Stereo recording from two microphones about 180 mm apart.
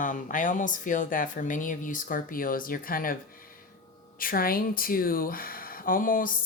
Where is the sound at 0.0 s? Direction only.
45° left (ahead or behind).